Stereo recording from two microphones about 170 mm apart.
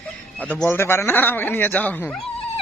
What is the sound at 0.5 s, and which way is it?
Speech, 10° left (ahead or behind).